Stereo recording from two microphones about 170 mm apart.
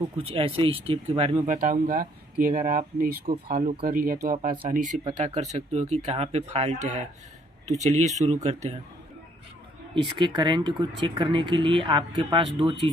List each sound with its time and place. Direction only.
0.2 s speech: 35° right (ahead or behind)
1.5 s speech: 50° right (ahead or behind)
9.9 s speech: 30° right (ahead or behind)